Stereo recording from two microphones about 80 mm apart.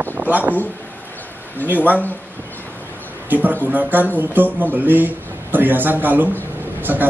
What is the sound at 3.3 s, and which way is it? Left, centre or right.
A man's voice, right.